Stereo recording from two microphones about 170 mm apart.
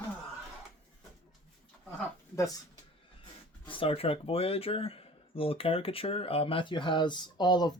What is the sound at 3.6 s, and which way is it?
Speech, 30° left (ahead or behind).